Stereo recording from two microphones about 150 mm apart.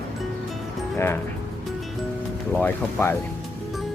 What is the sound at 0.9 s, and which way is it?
Speech, 15° left (ahead or behind).